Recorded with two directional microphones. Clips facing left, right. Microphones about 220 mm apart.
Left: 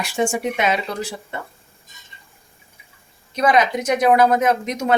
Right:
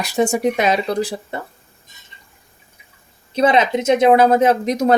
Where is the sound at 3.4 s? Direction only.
25° right (ahead or behind).